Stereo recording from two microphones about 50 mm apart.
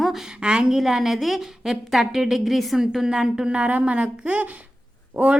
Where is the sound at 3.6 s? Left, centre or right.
Right.